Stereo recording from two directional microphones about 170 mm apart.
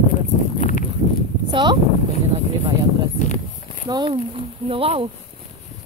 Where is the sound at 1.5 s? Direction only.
25° right (ahead or behind).